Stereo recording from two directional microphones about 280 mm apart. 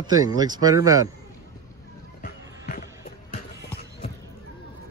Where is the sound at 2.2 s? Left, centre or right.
Left.